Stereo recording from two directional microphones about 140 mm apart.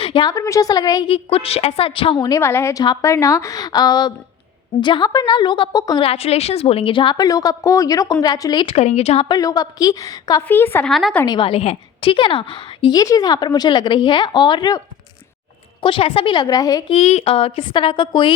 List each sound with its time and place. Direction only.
0.0 s a sound: 40° left (ahead or behind)
0.3 s a woman's voice: 25° left (ahead or behind)
1.0 s a woman's voice: 40° left (ahead or behind)
2.2 s a woman's voice: 20° left (ahead or behind)
6.0 s a woman's voice: 45° left (ahead or behind); by 8.6 s 30° left (ahead or behind)
8.6 s speech: 50° left (ahead or behind)
9.3 s a woman's voice: 25° left (ahead or behind)
10.8 s a woman's voice: centre (ahead or behind)
11.3 s a woman's voice: 40° left (ahead or behind)
15.8 s a woman's voice: 40° left (ahead or behind)
16.9 s a woman's voice: 50° left (ahead or behind)